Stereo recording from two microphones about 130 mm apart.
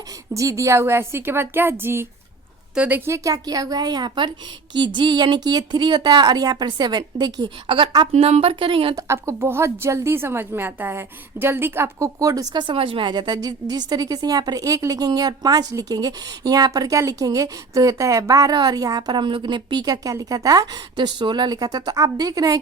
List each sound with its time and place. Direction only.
0.3 s a woman's voice: 25° right (ahead or behind)
3.1 s a woman's voice: 30° right (ahead or behind)
8.1 s speech: 50° right (ahead or behind)
9.0 s a woman's voice: 20° right (ahead or behind)